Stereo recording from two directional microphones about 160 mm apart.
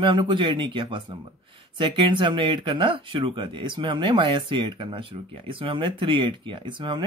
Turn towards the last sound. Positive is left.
turn(degrees=-30)  # may be behind; listen again after turning